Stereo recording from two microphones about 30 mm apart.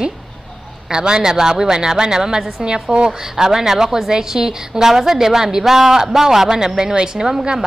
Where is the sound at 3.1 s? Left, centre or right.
Centre.